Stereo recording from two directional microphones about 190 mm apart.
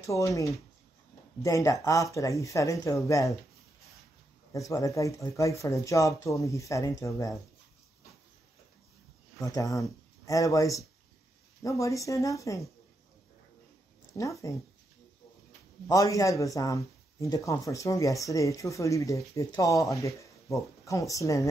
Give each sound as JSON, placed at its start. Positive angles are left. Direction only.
{"t": 0.0, "sound": "speech", "side_deg": 15}
{"t": 4.5, "sound": "speech", "side_deg": 15}
{"t": 9.4, "sound": "speech", "side_deg": 20}
{"t": 14.1, "sound": "speech", "side_deg": 15}
{"t": 15.9, "sound": "speech", "side_deg": 15}